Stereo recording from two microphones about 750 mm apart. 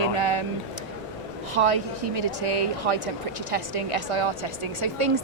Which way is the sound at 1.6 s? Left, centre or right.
Right.